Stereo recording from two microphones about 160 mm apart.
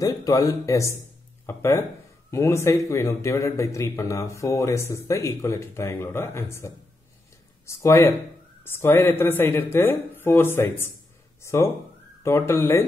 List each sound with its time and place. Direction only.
0.0 s a man's voice: 20° left (ahead or behind)